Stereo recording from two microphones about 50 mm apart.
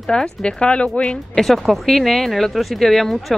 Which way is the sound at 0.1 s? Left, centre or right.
Centre.